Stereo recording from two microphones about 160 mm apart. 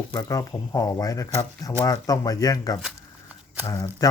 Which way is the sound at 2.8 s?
5° right (ahead or behind).